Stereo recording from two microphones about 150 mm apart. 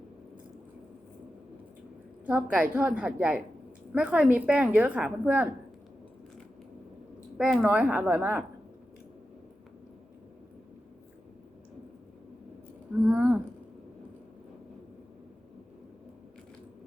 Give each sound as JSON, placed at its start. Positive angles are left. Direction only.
{"t": 2.2, "sound": "a woman's voice", "side_deg": -10}
{"t": 7.3, "sound": "a woman's voice", "side_deg": -5}
{"t": 13.1, "sound": "a sound", "side_deg": -10}